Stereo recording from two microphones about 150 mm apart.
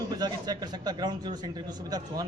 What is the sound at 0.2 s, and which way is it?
A man's voice, 25° right (ahead or behind).